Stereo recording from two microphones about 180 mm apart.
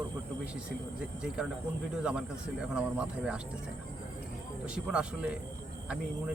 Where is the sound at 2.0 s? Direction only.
5° right (ahead or behind).